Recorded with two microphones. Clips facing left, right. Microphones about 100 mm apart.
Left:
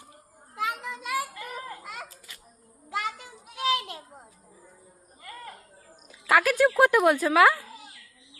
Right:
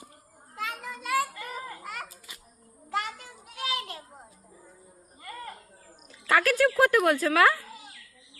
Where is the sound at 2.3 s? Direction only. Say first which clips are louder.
Right 1 dB; 15° right (ahead or behind).